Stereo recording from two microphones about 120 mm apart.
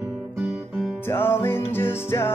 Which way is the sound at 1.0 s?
20° left (ahead or behind).